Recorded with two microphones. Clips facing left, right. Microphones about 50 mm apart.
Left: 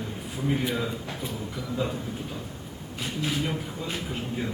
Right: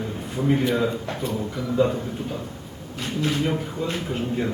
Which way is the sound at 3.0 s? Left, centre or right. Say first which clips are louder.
Right 5 dB; centre.